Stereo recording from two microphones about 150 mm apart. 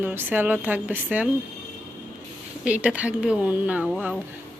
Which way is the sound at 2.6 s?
5° right (ahead or behind).